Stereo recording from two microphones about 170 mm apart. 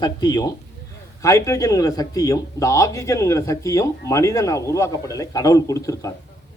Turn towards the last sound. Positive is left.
turn(degrees=20)  # may be behind; listen again after turning